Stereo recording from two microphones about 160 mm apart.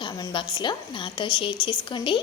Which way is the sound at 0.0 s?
30° left (ahead or behind).